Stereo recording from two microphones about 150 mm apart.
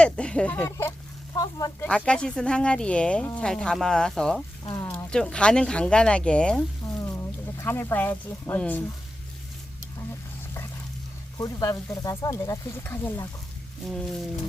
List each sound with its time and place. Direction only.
0.0 s speech: 5° left (ahead or behind)
0.5 s a sound: 15° left (ahead or behind)
1.8 s speech: 10° left (ahead or behind)
4.7 s a sound: 25° left (ahead or behind)
5.1 s speech: 5° left (ahead or behind)
7.0 s speech: 20° left (ahead or behind)
11.3 s speech: 25° left (ahead or behind)
13.8 s speech: 5° left (ahead or behind)